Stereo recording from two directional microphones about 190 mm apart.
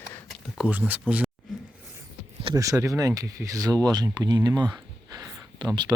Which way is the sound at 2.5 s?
15° right (ahead or behind).